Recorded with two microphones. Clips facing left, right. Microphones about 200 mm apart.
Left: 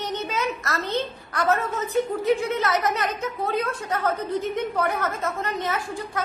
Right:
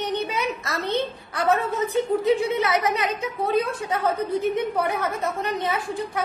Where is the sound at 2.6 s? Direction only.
15° right (ahead or behind).